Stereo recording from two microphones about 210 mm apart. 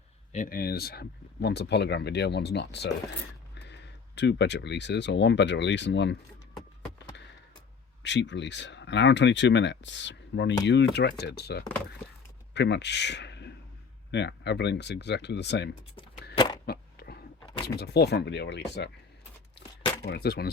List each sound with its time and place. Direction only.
0.3 s speech: 40° left (ahead or behind)
8.0 s speech: 60° left (ahead or behind)
16.6 s a sound: 50° left (ahead or behind)
17.7 s speech: 50° left (ahead or behind)
20.1 s speech: 50° left (ahead or behind)